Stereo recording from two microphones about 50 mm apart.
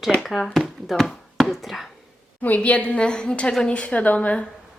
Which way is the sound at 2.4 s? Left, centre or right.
Left.